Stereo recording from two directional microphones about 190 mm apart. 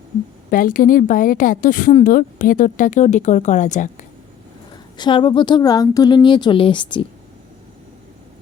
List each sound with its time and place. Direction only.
0.5 s a woman's voice: 45° left (ahead or behind)
4.9 s a woman's voice: 25° left (ahead or behind)